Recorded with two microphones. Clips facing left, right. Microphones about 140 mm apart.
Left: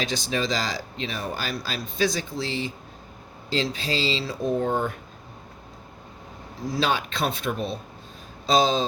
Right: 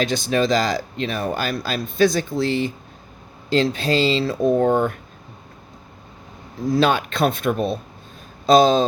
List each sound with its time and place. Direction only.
0.0 s speech: 55° right (ahead or behind)
6.7 s speech: 55° right (ahead or behind)